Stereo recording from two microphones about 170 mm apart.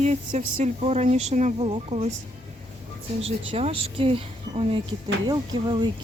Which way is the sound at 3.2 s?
35° right (ahead or behind).